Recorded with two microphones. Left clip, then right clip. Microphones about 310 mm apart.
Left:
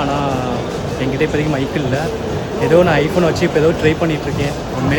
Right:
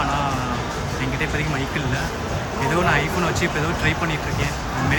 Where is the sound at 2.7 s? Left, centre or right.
Centre.